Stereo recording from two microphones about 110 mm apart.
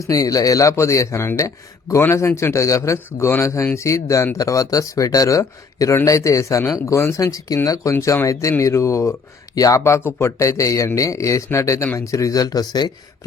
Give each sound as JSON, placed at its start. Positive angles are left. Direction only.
{"t": 0.0, "sound": "speech", "side_deg": 30}